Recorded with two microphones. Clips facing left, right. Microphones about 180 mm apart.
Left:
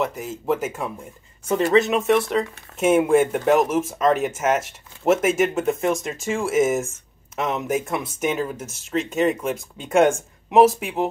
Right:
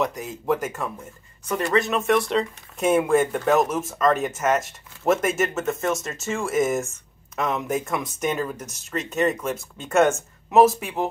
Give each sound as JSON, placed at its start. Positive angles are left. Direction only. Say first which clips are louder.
{"t": 0.0, "sound": "speech", "louder": "left 1 dB", "side_deg": 10}
{"t": 1.5, "sound": "speech", "louder": "left 4 dB", "side_deg": 20}
{"t": 2.0, "sound": "speech", "louder": "left 2 dB", "side_deg": 5}